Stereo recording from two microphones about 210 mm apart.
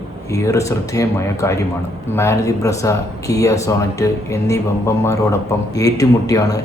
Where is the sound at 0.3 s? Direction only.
15° left (ahead or behind).